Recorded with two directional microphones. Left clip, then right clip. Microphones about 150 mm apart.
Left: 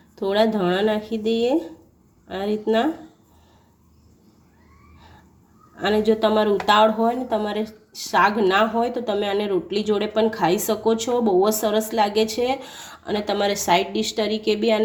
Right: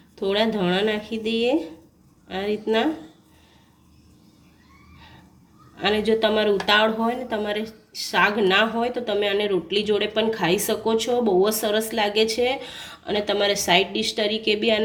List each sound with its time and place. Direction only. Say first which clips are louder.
0.2 s speech: left 2 dB; 45° left (ahead or behind)
5.7 s speech: left 1 dB; 40° left (ahead or behind)